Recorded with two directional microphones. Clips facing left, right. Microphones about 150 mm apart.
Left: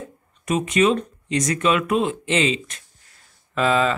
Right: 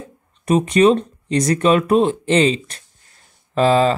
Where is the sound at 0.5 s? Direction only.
35° right (ahead or behind).